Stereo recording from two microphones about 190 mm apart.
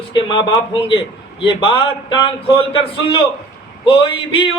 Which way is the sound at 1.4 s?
25° left (ahead or behind).